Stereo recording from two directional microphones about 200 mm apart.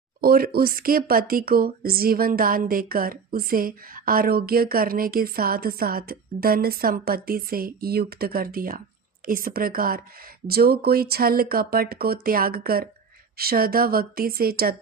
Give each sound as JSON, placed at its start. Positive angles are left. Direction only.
{"t": 0.2, "sound": "speech", "side_deg": -50}